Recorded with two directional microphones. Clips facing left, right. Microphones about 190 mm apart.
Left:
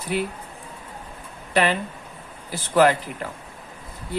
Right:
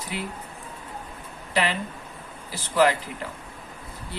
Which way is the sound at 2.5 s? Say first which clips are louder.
Left 3 dB; 55° left (ahead or behind).